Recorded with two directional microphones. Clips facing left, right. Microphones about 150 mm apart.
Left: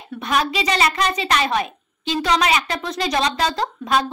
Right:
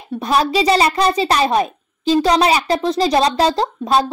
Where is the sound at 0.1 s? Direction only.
35° right (ahead or behind).